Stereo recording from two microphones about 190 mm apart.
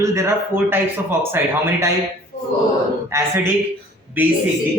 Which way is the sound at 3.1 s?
15° right (ahead or behind).